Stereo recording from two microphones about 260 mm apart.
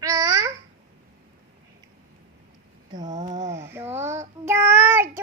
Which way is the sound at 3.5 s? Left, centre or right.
Centre.